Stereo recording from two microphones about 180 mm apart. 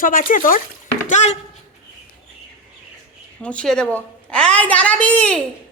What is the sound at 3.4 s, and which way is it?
A woman's voice, 5° left (ahead or behind).